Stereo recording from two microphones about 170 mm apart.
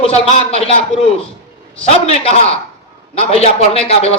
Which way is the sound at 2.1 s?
35° left (ahead or behind).